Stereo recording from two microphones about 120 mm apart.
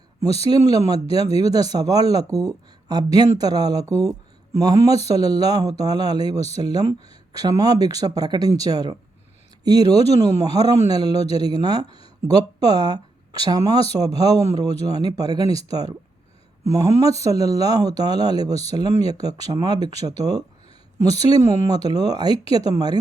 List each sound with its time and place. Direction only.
0.5 s a man's voice: 30° right (ahead or behind)
17.0 s speech: 30° right (ahead or behind)